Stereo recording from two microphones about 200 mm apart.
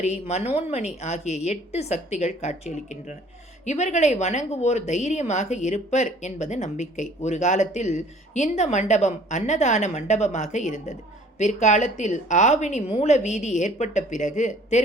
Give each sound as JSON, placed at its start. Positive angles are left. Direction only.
{"t": 0.0, "sound": "a woman's voice", "side_deg": 35}